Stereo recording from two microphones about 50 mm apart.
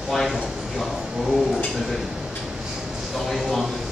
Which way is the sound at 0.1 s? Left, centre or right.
Centre.